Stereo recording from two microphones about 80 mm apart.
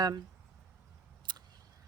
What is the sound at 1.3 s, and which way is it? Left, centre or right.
Single-lens reflex camera, right.